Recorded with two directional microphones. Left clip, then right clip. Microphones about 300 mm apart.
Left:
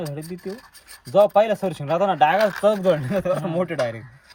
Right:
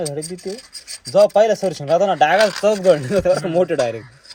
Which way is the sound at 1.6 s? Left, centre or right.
Left.